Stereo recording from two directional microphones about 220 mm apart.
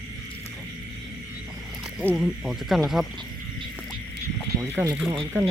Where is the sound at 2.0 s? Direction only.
Centre (ahead or behind).